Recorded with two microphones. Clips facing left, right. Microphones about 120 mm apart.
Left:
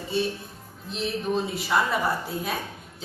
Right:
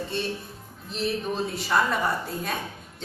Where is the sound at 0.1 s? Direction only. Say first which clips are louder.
Left 3 dB; 5° left (ahead or behind).